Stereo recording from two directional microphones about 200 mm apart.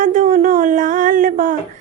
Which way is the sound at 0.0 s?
40° right (ahead or behind).